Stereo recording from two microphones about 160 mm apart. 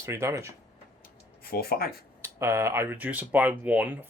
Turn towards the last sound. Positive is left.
turn(degrees=-10)  # may be behind; listen again after turning